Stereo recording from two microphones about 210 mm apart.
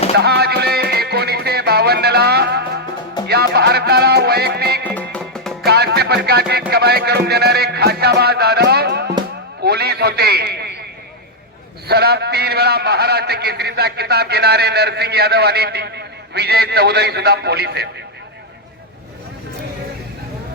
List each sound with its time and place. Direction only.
0.2 s music: 50° right (ahead or behind)
3.2 s a man's voice: 50° right (ahead or behind)
4.9 s music: 5° left (ahead or behind)
5.6 s music: 50° right (ahead or behind)
9.6 s a sound: 50° right (ahead or behind)
11.9 s a man's voice: 50° right (ahead or behind)